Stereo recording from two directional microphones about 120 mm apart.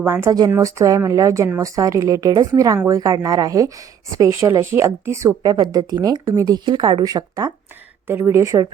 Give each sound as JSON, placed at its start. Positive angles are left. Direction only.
{"t": 0.0, "sound": "a woman's voice", "side_deg": -20}
{"t": 8.0, "sound": "a woman's voice", "side_deg": -20}